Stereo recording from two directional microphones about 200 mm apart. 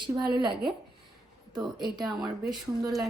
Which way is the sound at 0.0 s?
25° right (ahead or behind).